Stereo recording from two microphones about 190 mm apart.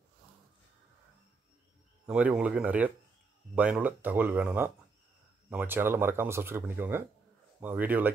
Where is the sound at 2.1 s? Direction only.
5° right (ahead or behind).